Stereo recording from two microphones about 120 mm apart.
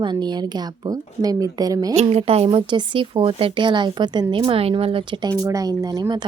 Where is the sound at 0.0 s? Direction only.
40° right (ahead or behind).